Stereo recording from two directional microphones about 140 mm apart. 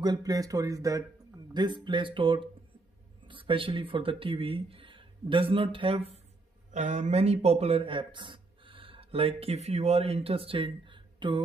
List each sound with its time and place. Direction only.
0.0 s speech: 30° right (ahead or behind); by 6.2 s 45° right (ahead or behind)
6.7 s speech: 60° right (ahead or behind); by 11.4 s 35° right (ahead or behind)